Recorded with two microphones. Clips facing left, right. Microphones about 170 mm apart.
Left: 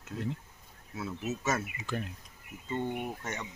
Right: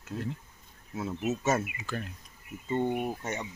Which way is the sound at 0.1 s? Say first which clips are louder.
Right 1 dB; 25° right (ahead or behind).